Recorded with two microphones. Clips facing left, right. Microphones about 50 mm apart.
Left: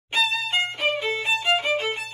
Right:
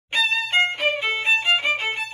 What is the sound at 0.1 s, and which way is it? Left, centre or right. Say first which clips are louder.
Music: right 2 dB; right.